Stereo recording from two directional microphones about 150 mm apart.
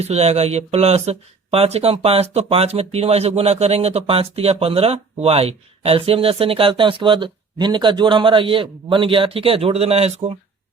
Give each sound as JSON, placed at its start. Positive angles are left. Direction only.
{"t": 0.0, "sound": "speech", "side_deg": -45}